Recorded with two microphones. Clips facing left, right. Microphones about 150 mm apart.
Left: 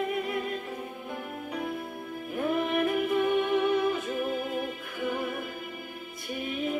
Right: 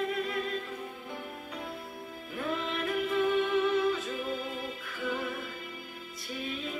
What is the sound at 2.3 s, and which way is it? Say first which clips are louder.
Music: left 6 dB; 55° left (ahead or behind).